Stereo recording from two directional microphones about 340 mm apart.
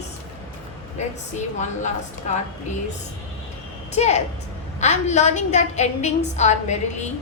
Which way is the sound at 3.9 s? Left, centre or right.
Centre.